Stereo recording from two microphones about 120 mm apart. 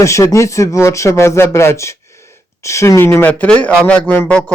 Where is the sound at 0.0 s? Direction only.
25° left (ahead or behind).